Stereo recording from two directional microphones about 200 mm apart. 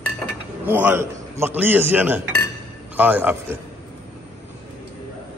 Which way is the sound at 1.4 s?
10° right (ahead or behind).